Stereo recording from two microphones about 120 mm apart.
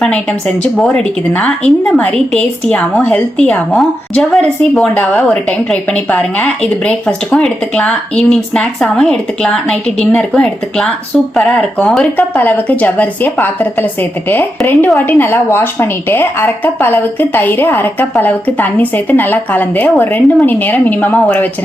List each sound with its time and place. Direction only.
0.0 s a woman's voice: 5° left (ahead or behind)